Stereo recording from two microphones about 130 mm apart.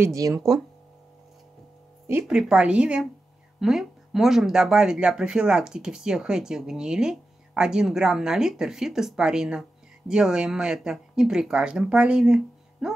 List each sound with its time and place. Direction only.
0.0 s speech: 20° right (ahead or behind)
2.2 s a woman's voice: 5° right (ahead or behind)